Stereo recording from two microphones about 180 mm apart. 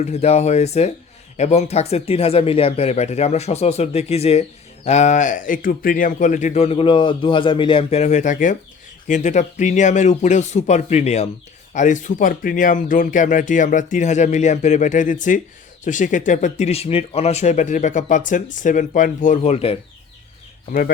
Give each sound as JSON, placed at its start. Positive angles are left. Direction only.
{"t": 0.0, "sound": "speech", "side_deg": 40}
{"t": 20.7, "sound": "speech", "side_deg": 50}